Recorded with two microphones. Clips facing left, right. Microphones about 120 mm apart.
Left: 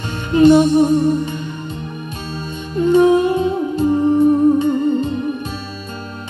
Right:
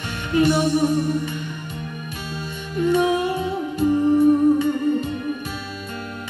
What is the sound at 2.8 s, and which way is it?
Music, 30° left (ahead or behind).